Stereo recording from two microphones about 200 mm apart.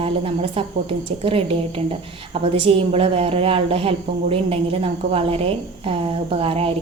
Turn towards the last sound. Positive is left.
turn(degrees=-30)  # may be behind; listen again after turning